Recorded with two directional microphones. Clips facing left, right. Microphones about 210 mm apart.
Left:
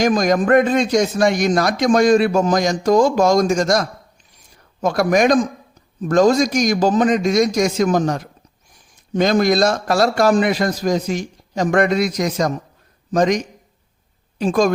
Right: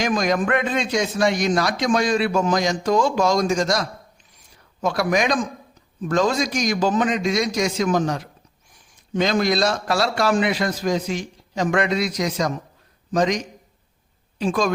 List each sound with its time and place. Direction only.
0.0 s a man's voice: 40° left (ahead or behind)